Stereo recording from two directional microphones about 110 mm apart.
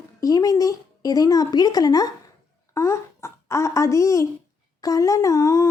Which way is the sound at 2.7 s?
25° left (ahead or behind).